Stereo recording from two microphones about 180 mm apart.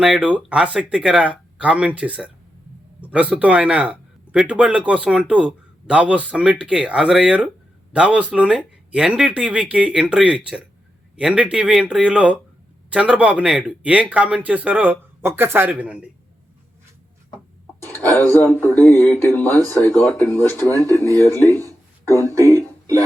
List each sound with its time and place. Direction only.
0.0 s speech: 5° right (ahead or behind)
17.8 s music: 10° left (ahead or behind)
18.2 s speech: 10° left (ahead or behind)
22.0 s speech: 20° right (ahead or behind)
22.5 s a sound: 20° right (ahead or behind)